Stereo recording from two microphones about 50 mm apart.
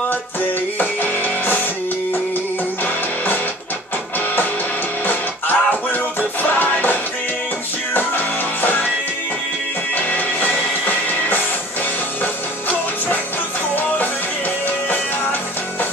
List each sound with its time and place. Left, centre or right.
0.7 s music: left
5.0 s music: left
8.5 s music: left
9.9 s music: left